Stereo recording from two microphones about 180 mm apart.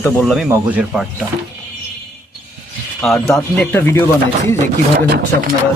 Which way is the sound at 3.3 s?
15° left (ahead or behind).